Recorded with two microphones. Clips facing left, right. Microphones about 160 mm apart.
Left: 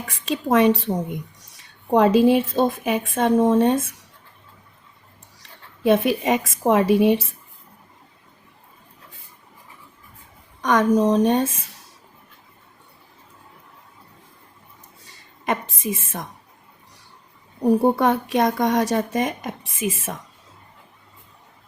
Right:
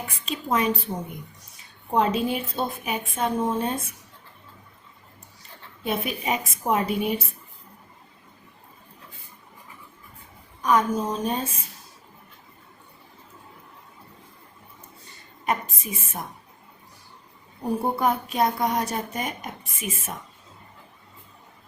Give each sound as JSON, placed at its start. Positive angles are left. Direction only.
{"t": 0.3, "sound": "speech", "side_deg": 80}
{"t": 5.9, "sound": "speech", "side_deg": 90}
{"t": 10.6, "sound": "a woman's voice", "side_deg": 90}
{"t": 15.0, "sound": "a sound", "side_deg": 90}
{"t": 17.9, "sound": "speech", "side_deg": 90}